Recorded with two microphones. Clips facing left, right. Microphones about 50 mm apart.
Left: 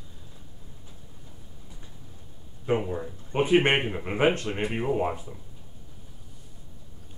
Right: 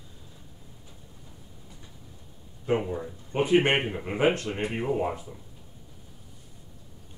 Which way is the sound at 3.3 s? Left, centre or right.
Left.